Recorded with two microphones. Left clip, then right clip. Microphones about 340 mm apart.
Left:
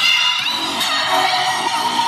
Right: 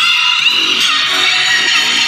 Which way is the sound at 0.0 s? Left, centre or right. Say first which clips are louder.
Right 5 dB; left.